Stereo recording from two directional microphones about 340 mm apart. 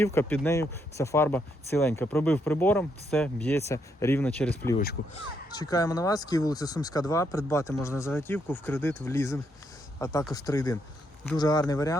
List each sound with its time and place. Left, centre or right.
0.0 s speech: centre
4.8 s speech: left
5.5 s speech: centre